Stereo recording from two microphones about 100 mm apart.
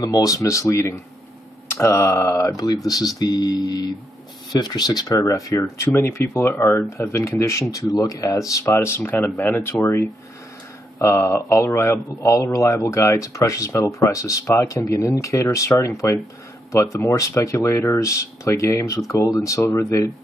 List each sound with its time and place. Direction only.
0.0 s speech: 35° left (ahead or behind)